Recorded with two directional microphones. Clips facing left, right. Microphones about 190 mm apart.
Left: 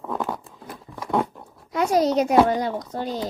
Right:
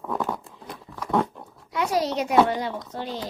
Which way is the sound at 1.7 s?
45° left (ahead or behind).